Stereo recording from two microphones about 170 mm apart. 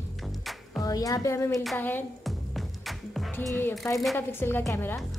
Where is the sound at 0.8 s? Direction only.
20° left (ahead or behind).